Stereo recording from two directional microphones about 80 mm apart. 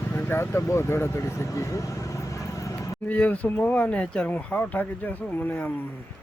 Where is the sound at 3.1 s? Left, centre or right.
Centre.